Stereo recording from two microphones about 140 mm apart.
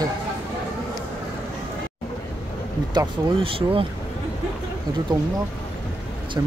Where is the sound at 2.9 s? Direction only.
40° right (ahead or behind).